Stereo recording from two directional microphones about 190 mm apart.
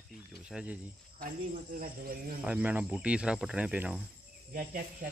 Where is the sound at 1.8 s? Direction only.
50° right (ahead or behind).